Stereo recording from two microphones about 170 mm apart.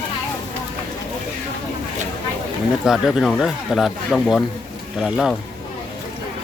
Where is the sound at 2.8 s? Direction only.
5° right (ahead or behind).